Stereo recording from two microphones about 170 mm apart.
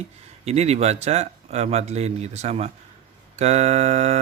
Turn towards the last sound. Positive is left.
turn(degrees=-40)  # may be behind; listen again after turning